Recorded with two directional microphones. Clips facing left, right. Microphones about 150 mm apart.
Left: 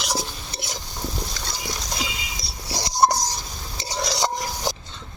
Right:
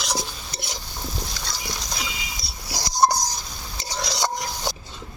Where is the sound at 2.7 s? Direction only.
25° left (ahead or behind).